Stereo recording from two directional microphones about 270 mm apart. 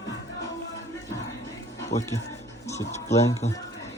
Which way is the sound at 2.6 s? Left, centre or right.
Centre.